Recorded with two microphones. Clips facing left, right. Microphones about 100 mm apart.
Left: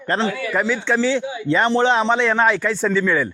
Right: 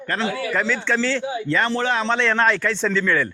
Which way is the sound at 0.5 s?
10° left (ahead or behind).